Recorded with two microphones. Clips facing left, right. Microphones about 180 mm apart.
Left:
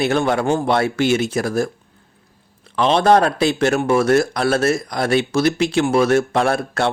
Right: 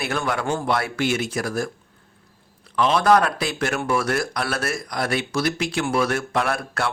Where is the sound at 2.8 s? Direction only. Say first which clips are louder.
Left 3 dB; 30° left (ahead or behind).